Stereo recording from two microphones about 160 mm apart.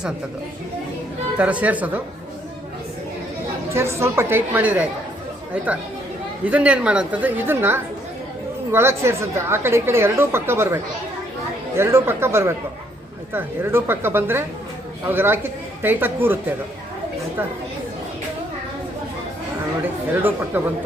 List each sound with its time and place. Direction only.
1.4 s a woman's voice: 10° right (ahead or behind)
3.7 s a woman's voice: 15° right (ahead or behind)
6.4 s a woman's voice: 10° right (ahead or behind)
11.8 s a woman's voice: 15° right (ahead or behind)
20.5 s a woman's voice: 10° right (ahead or behind)